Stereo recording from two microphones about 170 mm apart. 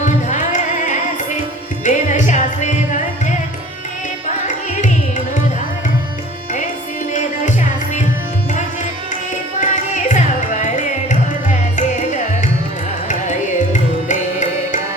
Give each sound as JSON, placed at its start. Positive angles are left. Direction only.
{"t": 0.0, "sound": "music", "side_deg": 45}
{"t": 4.4, "sound": "carnatic music", "side_deg": 45}
{"t": 9.6, "sound": "carnatic music", "side_deg": 45}
{"t": 11.1, "sound": "music", "side_deg": 45}
{"t": 14.1, "sound": "music", "side_deg": 45}